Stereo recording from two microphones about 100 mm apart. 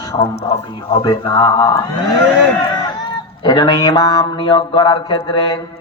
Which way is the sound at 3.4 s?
45° left (ahead or behind).